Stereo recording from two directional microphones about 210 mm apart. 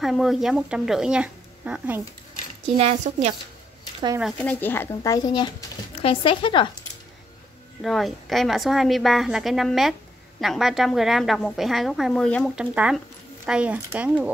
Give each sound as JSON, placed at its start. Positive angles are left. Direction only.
{"t": 0.0, "sound": "a woman's voice", "side_deg": 0}
{"t": 2.8, "sound": "a woman's voice", "side_deg": -30}
{"t": 4.2, "sound": "a woman's voice", "side_deg": 5}
{"t": 7.8, "sound": "a woman's voice", "side_deg": 0}